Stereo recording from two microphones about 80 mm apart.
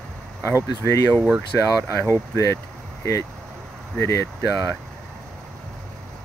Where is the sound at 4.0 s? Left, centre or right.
Left.